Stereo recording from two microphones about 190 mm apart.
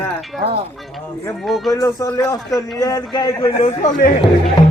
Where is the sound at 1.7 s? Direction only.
20° left (ahead or behind).